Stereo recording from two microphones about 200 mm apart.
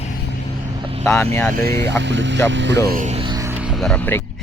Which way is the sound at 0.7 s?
25° right (ahead or behind).